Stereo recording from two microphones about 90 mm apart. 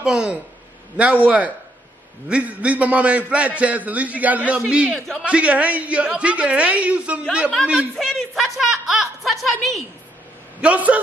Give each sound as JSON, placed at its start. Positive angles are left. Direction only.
{"t": 0.0, "sound": "a man's voice", "side_deg": -10}
{"t": 4.9, "sound": "speech", "side_deg": 5}
{"t": 5.2, "sound": "a man's voice", "side_deg": -15}
{"t": 7.9, "sound": "speech", "side_deg": 5}
{"t": 10.6, "sound": "a man's voice", "side_deg": -15}